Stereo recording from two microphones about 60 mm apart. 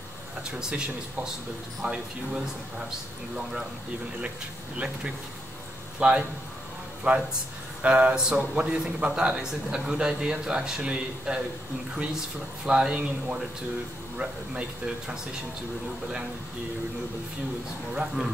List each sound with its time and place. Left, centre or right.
0.4 s a man's voice: centre
4.7 s a man's voice: centre
12.6 s a man's voice: centre
17.9 s a man's voice: centre